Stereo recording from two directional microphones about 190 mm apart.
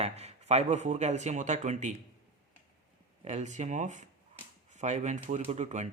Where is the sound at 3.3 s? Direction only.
40° right (ahead or behind).